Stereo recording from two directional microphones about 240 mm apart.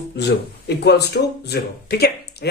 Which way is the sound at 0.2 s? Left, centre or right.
Left.